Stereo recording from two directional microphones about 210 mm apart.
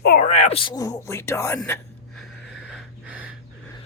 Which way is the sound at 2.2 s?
Centre (ahead or behind).